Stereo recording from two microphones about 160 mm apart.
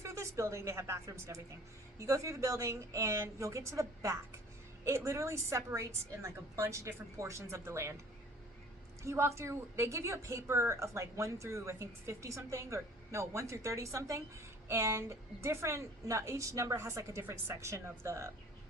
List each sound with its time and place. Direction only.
0.0 s a woman's voice: 20° right (ahead or behind)
9.0 s a woman's voice: 15° right (ahead or behind)